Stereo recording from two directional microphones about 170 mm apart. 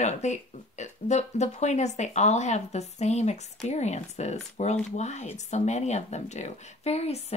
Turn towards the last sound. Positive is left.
turn(degrees=40)  # may be behind; listen again after turning